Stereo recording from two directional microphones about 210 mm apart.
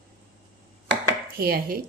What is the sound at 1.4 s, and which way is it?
Speech, 45° right (ahead or behind).